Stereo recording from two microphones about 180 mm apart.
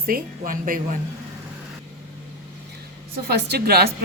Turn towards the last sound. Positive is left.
turn(degrees=-60)  # may be behind; listen again after turning